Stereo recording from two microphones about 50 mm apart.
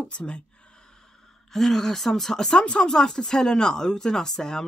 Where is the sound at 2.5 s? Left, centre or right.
Left.